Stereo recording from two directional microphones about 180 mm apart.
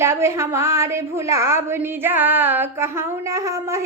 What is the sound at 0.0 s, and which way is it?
Child singing, 15° right (ahead or behind).